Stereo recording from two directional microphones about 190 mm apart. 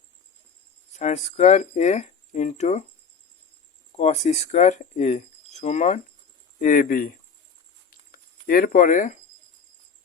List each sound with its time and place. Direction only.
0.9 s speech: 35° left (ahead or behind)
3.9 s speech: 35° left (ahead or behind)
7.9 s a sound: 50° left (ahead or behind)